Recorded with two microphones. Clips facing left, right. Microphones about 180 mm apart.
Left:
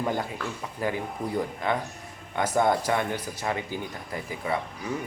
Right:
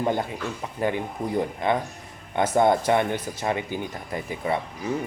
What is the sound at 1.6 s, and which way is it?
Speech, 20° right (ahead or behind).